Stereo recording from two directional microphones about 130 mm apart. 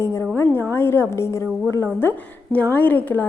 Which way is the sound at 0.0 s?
20° left (ahead or behind).